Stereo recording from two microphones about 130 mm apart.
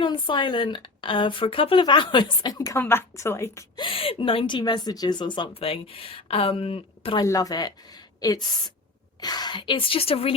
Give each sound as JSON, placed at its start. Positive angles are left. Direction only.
{"t": 0.0, "sound": "a woman's voice", "side_deg": 40}
{"t": 3.8, "sound": "speech", "side_deg": 45}
{"t": 7.2, "sound": "a woman's voice", "side_deg": 25}